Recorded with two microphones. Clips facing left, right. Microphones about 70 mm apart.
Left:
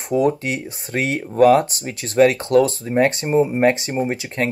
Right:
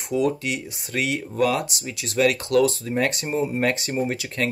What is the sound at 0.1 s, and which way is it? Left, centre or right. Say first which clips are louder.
Speech: left 4 dB; left.